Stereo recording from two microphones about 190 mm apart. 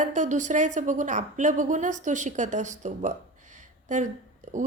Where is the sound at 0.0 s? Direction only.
40° right (ahead or behind).